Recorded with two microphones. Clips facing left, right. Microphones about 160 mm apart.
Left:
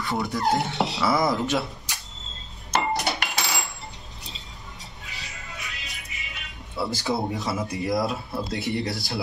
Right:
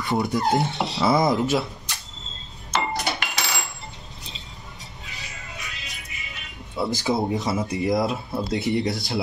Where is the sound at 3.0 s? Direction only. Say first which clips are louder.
Even; centre (ahead or behind).